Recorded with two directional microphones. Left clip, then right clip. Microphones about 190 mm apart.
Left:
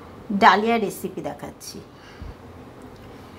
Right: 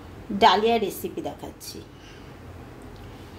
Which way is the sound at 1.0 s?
35° left (ahead or behind).